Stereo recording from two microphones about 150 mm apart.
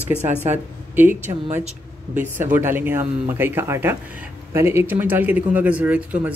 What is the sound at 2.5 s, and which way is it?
Speech, 15° right (ahead or behind).